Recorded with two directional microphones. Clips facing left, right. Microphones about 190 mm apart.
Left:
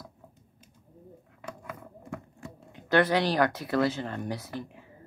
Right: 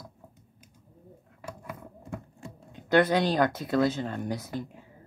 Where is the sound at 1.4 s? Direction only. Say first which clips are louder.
Right 1 dB; 5° right (ahead or behind).